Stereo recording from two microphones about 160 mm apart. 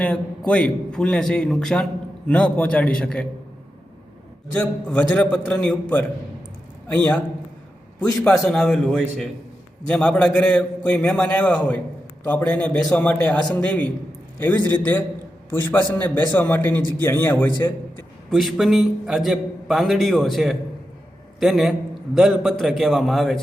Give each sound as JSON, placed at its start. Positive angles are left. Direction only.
{"t": 0.0, "sound": "a man's voice", "side_deg": 5}
{"t": 4.5, "sound": "a man's voice", "side_deg": 10}
{"t": 6.8, "sound": "a man's voice", "side_deg": 10}
{"t": 8.2, "sound": "a man's voice", "side_deg": 5}
{"t": 18.3, "sound": "a man's voice", "side_deg": 0}